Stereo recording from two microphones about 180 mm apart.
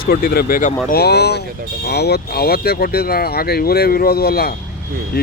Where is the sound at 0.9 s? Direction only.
65° left (ahead or behind).